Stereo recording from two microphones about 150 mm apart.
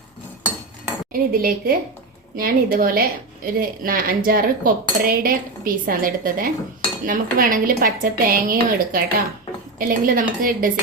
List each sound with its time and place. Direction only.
1.1 s a woman's voice: 75° right (ahead or behind)